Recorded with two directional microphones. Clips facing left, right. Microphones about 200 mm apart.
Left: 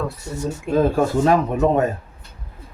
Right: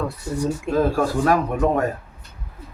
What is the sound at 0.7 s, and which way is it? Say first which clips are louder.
Speech: left 3 dB; 20° left (ahead or behind).